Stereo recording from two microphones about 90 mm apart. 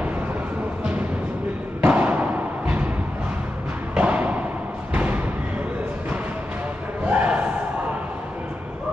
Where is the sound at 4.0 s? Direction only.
15° right (ahead or behind).